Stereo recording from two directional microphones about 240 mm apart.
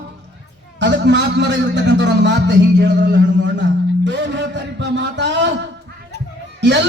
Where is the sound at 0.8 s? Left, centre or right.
Right.